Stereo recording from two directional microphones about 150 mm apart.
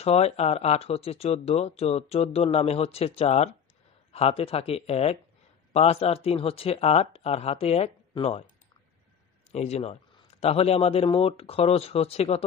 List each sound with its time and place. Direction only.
0.0 s speech: 45° left (ahead or behind)
9.5 s speech: 45° left (ahead or behind)